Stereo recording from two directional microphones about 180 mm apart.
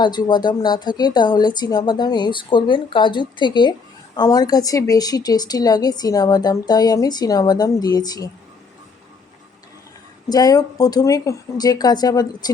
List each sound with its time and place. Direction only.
0.0 s a woman's voice: 25° left (ahead or behind)
10.2 s a woman's voice: 20° left (ahead or behind)